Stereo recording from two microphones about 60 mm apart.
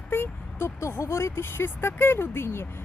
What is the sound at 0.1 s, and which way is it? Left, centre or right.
Vehicle, left.